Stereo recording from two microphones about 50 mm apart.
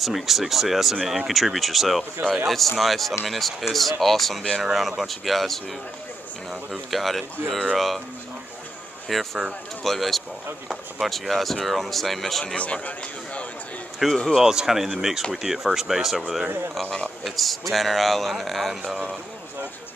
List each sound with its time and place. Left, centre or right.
0.0 s speech: centre
6.7 s speech: centre
9.1 s speech: centre
12.5 s a man's voice: left
14.1 s speech: centre
14.4 s speech: centre